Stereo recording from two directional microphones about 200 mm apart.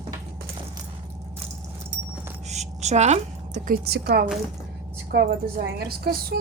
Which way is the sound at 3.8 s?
55° right (ahead or behind).